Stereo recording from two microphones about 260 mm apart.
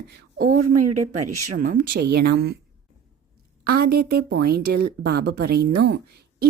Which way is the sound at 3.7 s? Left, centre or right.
Right.